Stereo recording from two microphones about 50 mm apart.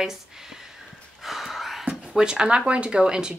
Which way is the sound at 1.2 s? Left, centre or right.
Centre.